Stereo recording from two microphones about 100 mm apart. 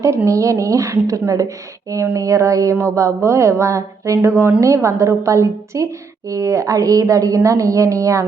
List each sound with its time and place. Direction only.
0.3 s a woman's voice: 30° right (ahead or behind)